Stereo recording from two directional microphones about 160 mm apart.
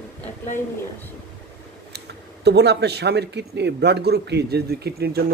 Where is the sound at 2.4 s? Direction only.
90° right.